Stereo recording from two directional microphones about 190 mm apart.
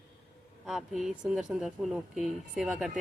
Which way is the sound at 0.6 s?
Centre (ahead or behind).